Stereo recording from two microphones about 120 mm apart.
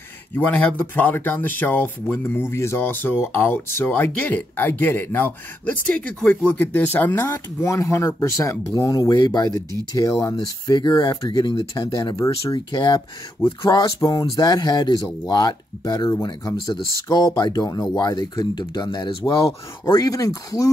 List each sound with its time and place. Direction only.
0.4 s speech: 15° left (ahead or behind)
7.2 s speech: 25° left (ahead or behind); by 19.5 s 45° left (ahead or behind)
19.8 s speech: 30° left (ahead or behind)